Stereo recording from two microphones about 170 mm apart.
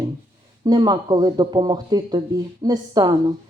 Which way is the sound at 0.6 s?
25° right (ahead or behind).